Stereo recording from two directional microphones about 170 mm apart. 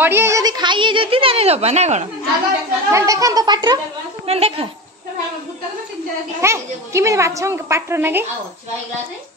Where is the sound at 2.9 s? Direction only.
20° right (ahead or behind).